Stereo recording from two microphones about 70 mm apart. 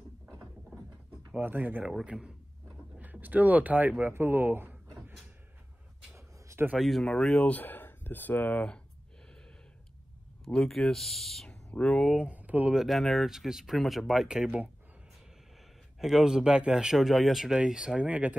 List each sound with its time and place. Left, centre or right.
1.4 s speech: right
3.0 s speech: right
6.1 s a sound: right
6.8 s speech: centre
7.4 s speech: left
10.4 s speech: centre
12.2 s speech: centre
12.7 s speech: centre
16.0 s speech: centre